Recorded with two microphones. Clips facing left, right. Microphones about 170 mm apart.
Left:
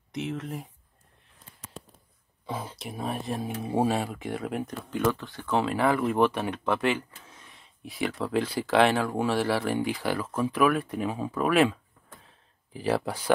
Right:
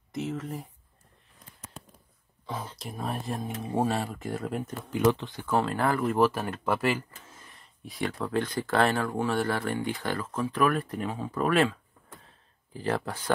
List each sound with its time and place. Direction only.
0.1 s speech: centre (ahead or behind)
2.4 s speech: 10° left (ahead or behind)
4.9 s speech: 15° right (ahead or behind)
5.5 s speech: centre (ahead or behind)
12.8 s speech: 10° left (ahead or behind)